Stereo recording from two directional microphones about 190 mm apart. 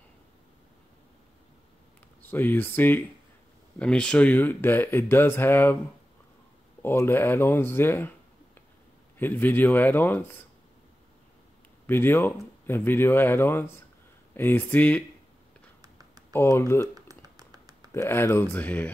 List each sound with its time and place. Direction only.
2.3 s speech: 10° left (ahead or behind)
6.8 s speech: 10° left (ahead or behind)
9.2 s speech: 10° left (ahead or behind)
11.8 s speech: 10° left (ahead or behind)
15.8 s a sound: 20° right (ahead or behind)
16.3 s speech: 10° left (ahead or behind)
16.8 s typing: 20° right (ahead or behind)
17.9 s speech: 10° left (ahead or behind)